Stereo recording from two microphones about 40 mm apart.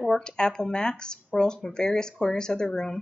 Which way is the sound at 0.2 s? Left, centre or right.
Centre.